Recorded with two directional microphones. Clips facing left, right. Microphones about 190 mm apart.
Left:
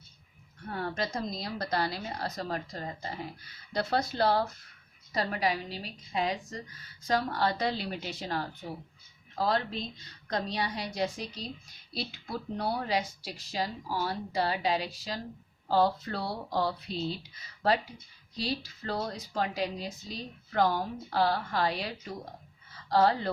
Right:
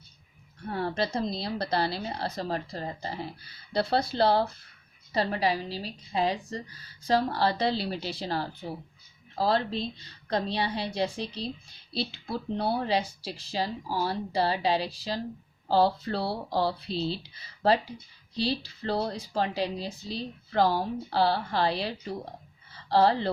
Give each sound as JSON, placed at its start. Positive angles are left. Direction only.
{"t": 0.6, "sound": "a woman's voice", "side_deg": -30}